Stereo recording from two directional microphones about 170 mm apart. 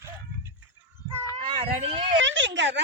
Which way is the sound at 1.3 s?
35° right (ahead or behind).